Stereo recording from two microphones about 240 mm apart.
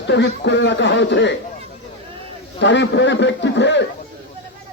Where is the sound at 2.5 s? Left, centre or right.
Left.